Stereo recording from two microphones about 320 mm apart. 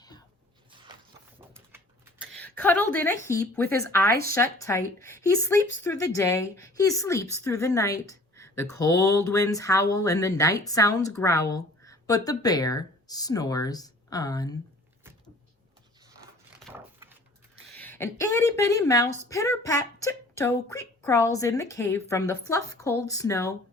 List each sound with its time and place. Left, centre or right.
1.4 s typing: centre
2.6 s a woman's voice: centre
4.1 s speech: right
4.5 s a woman's voice: centre
9.0 s a sound: left
9.2 s speech: centre
16.6 s a sound: centre
17.7 s speech: centre